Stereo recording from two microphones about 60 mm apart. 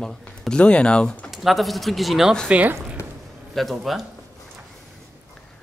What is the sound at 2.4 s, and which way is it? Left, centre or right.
Speech, centre.